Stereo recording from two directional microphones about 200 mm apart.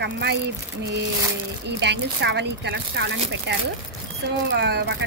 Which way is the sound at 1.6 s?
55° right (ahead or behind).